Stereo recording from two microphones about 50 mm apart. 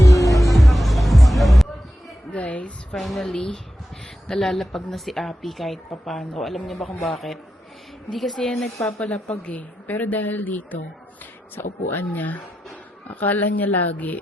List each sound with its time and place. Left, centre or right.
0.0 s music: left
0.5 s music: centre
2.3 s a sound: left
2.9 s a woman's voice: centre
8.1 s a woman's voice: centre
9.0 s a woman's voice: left